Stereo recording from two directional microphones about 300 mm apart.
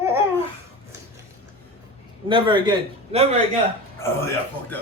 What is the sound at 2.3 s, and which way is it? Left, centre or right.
Speech, centre.